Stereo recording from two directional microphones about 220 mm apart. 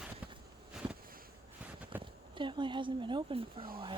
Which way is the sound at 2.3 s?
20° right (ahead or behind).